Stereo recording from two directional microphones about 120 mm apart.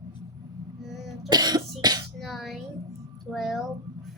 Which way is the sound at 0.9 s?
Centre (ahead or behind).